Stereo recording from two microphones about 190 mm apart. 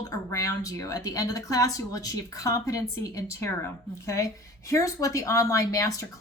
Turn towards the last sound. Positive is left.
turn(degrees=15)  # may be behind; listen again after turning